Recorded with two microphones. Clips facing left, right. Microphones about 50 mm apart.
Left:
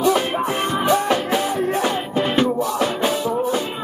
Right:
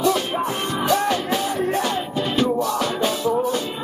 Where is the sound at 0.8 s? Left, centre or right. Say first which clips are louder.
Left 1 dB; left.